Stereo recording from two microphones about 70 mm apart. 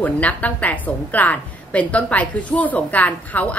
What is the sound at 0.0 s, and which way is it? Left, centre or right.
A woman's voice, left.